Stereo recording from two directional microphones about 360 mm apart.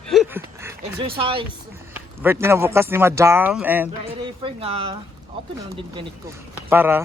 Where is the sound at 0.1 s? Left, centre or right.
Centre.